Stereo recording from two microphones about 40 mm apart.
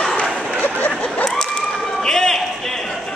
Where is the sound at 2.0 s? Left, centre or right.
Centre.